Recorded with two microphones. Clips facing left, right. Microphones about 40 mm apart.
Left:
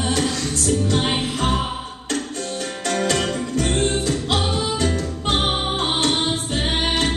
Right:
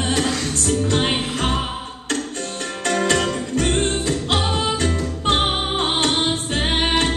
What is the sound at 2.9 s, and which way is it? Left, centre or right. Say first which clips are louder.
Music: right 2 dB; right.